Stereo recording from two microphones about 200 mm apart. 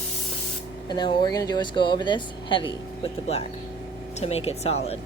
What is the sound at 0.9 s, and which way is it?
Speech, 25° left (ahead or behind).